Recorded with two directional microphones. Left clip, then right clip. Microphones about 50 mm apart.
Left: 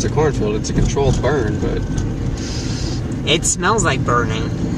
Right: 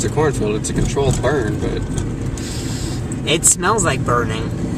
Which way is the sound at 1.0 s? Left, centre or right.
Right.